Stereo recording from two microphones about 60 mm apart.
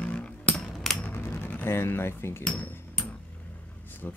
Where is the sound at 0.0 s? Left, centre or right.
Left.